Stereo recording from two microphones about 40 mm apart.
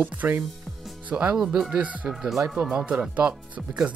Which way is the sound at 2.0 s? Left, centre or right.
Centre.